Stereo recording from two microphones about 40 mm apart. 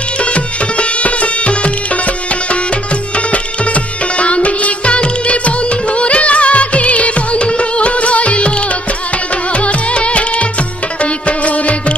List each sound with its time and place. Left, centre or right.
0.2 s music: left
4.2 s music: left
5.9 s music of bollywood: left
9.7 s music: left
11.2 s music: left